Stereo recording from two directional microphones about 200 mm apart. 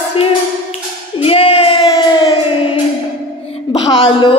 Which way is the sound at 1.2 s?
30° left (ahead or behind).